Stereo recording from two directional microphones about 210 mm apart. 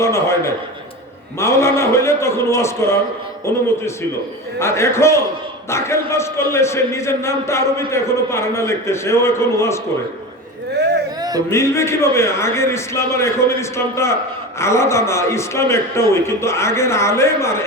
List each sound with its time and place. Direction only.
0.0 s a sound: 15° left (ahead or behind)
1.4 s a man's voice: 15° left (ahead or behind)
11.2 s music: 20° right (ahead or behind)
11.4 s a man's voice: 15° left (ahead or behind)